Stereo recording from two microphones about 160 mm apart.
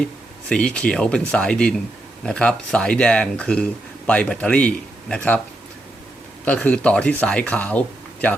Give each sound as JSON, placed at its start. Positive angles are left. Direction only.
{"t": 0.0, "sound": "speech", "side_deg": 5}
{"t": 6.4, "sound": "speech", "side_deg": 10}